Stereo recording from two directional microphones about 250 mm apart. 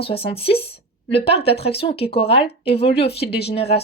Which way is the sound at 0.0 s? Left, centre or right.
Left.